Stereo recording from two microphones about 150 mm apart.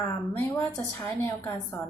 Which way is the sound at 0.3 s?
15° left (ahead or behind).